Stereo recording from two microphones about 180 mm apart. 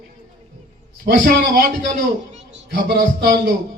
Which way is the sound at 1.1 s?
55° right (ahead or behind).